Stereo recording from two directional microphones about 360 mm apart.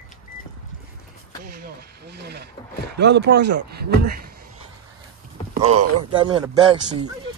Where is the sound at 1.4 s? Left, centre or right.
Right.